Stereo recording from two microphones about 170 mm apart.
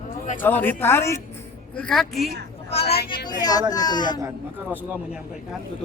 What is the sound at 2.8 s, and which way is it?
Speech, 70° left (ahead or behind).